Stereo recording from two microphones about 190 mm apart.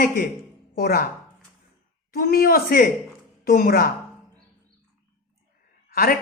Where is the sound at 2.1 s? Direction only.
50° left (ahead or behind).